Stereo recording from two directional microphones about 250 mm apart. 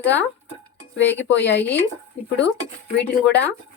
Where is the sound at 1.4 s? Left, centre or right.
Left.